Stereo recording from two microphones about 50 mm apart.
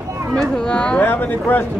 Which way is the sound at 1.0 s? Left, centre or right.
Left.